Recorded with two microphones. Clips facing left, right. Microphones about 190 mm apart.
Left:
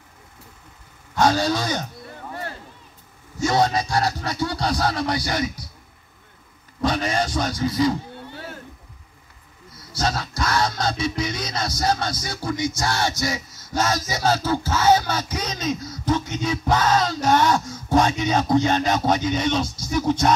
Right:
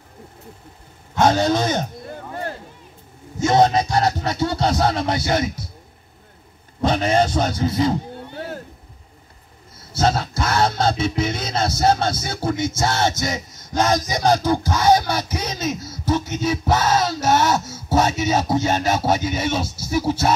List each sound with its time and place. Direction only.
1.1 s a man's voice: 20° right (ahead or behind)
2.0 s a sound: 35° right (ahead or behind)
3.3 s music: 20° right (ahead or behind)
6.8 s music: 25° right (ahead or behind)
10.0 s music: 25° right (ahead or behind); by 20.3 s 5° right (ahead or behind)